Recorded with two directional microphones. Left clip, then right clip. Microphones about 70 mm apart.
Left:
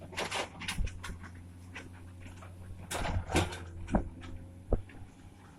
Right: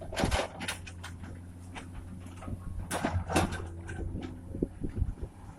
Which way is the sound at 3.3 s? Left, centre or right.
Right.